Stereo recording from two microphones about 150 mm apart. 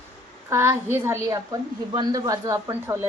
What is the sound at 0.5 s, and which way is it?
A woman's voice, 15° right (ahead or behind).